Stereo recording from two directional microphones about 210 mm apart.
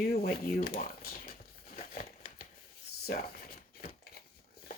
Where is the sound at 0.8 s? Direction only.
45° left (ahead or behind).